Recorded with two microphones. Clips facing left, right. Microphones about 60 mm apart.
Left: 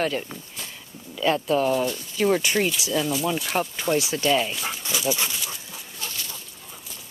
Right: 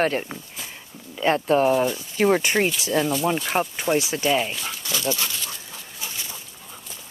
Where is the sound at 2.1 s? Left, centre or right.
Right.